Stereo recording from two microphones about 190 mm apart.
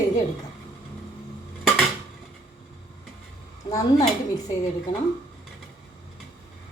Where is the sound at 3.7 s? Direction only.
20° left (ahead or behind).